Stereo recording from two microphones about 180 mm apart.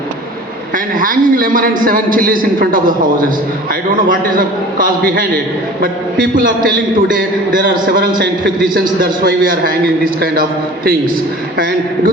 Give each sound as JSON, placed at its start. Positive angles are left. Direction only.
{"t": 0.9, "sound": "a man's voice", "side_deg": -50}
{"t": 6.3, "sound": "a man's voice", "side_deg": -50}
{"t": 7.6, "sound": "a man's voice", "side_deg": -60}
{"t": 11.5, "sound": "a man's voice", "side_deg": -55}